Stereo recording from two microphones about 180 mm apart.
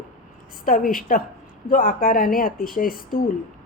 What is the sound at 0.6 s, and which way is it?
A woman's voice, 50° left (ahead or behind).